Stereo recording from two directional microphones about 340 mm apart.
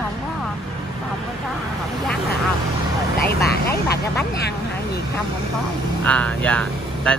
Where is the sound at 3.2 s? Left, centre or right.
Left.